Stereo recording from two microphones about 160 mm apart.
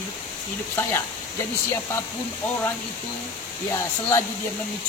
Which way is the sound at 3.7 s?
15° left (ahead or behind).